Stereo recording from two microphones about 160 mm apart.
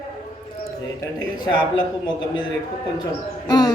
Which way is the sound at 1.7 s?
30° left (ahead or behind).